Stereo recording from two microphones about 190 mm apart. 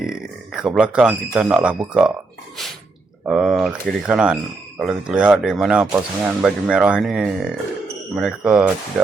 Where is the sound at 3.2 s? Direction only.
5° right (ahead or behind).